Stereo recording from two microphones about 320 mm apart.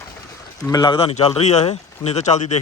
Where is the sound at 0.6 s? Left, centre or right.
Centre.